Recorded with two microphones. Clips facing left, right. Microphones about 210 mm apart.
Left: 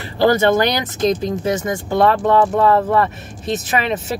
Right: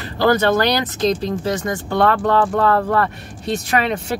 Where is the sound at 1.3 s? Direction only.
20° left (ahead or behind).